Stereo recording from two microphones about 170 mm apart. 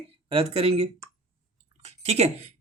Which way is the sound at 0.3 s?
35° right (ahead or behind).